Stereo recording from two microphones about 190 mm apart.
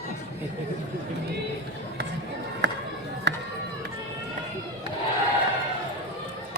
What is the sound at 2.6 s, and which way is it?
Music, 65° right (ahead or behind).